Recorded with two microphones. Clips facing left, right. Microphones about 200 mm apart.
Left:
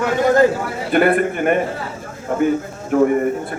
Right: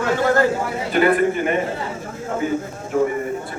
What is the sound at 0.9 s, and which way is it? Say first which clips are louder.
Speech: left 1 dB; 55° left (ahead or behind).